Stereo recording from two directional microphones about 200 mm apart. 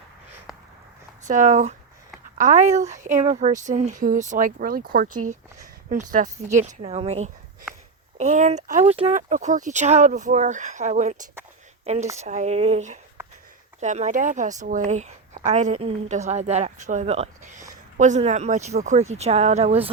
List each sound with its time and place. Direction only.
1.2 s a woman's voice: 40° right (ahead or behind)
13.2 s a sound: 10° right (ahead or behind)
13.7 s a woman's voice: 35° right (ahead or behind)